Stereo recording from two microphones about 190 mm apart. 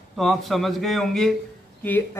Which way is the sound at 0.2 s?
Centre (ahead or behind).